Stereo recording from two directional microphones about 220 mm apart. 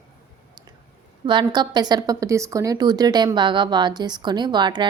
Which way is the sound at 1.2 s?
20° right (ahead or behind).